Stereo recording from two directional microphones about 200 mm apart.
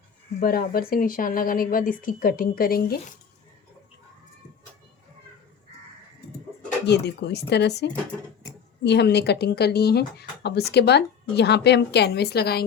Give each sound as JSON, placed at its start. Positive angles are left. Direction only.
{"t": 0.3, "sound": "speech", "side_deg": 45}
{"t": 6.8, "sound": "speech", "side_deg": 55}